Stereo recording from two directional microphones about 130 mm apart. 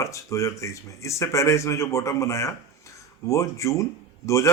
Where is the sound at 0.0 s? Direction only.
25° left (ahead or behind).